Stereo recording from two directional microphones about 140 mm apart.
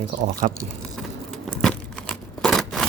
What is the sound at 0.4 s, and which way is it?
Speech, 55° right (ahead or behind).